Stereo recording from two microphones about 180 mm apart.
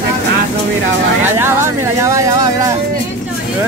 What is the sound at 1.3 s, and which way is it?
Speech, 15° right (ahead or behind).